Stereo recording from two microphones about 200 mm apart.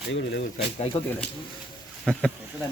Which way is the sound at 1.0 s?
30° left (ahead or behind).